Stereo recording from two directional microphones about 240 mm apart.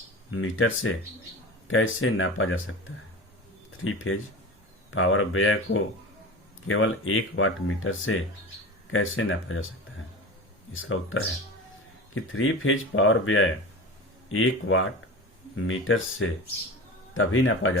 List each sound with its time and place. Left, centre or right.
0.3 s speech: left
3.8 s speech: left
10.7 s speech: left
12.3 s speech: left